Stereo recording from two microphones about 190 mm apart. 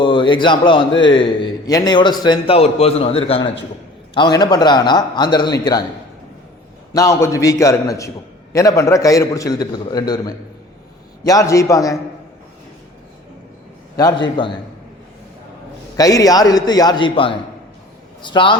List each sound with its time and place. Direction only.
0.0 s a man's voice: 25° left (ahead or behind)
6.9 s a man's voice: 15° left (ahead or behind)
13.9 s a man's voice: 20° left (ahead or behind)
16.0 s a man's voice: 20° left (ahead or behind)